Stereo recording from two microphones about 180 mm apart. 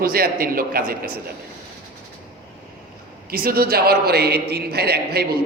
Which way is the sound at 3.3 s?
55° right (ahead or behind).